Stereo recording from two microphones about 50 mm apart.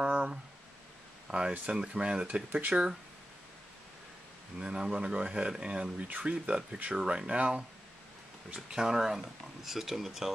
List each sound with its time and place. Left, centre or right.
0.0 s a sound: right
1.3 s speech: centre
1.7 s speech: centre
2.7 s speech: centre
4.6 s speech: centre
8.6 s speech: centre